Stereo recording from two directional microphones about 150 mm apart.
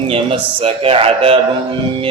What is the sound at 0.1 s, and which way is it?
Speech, 40° right (ahead or behind).